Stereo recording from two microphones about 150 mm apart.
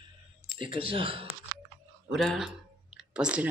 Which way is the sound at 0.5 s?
35° right (ahead or behind).